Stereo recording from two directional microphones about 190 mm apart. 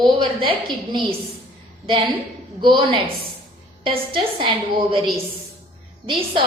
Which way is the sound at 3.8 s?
25° right (ahead or behind).